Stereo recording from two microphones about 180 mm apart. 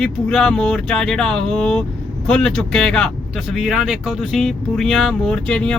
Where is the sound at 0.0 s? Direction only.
5° left (ahead or behind).